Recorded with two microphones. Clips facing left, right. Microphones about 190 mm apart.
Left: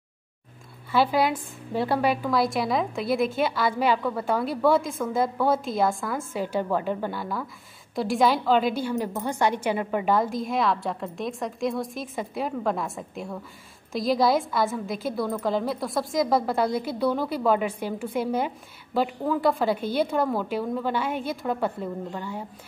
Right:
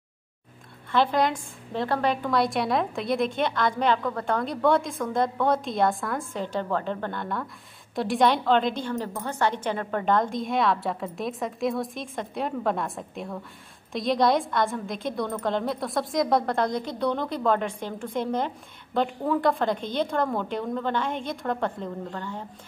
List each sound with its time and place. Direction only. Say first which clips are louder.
0.9 s a woman's voice: left 1 dB; 5° left (ahead or behind)